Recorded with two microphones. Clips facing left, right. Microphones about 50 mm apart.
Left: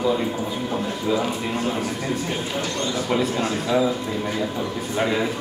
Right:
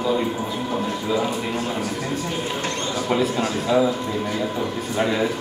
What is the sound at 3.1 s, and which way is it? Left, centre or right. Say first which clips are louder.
Speech: right 2 dB; centre.